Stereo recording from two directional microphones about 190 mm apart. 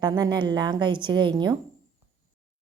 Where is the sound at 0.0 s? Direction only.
25° right (ahead or behind).